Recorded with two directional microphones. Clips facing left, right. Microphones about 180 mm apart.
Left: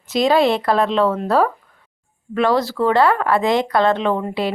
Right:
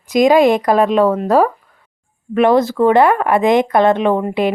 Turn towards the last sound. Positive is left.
turn(degrees=-15)  # may be behind; listen again after turning